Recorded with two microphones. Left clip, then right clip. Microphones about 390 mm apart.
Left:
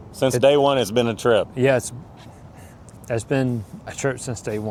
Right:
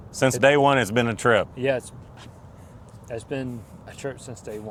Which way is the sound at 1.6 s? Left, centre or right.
Left.